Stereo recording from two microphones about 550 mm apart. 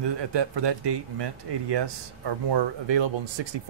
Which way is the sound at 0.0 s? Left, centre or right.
Right.